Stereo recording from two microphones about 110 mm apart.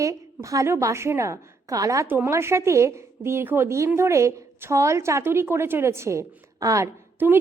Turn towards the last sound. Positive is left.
turn(degrees=-15)  # may be behind; listen again after turning